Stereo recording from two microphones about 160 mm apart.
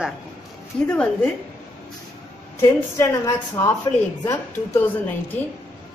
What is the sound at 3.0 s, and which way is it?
Speech, 20° left (ahead or behind).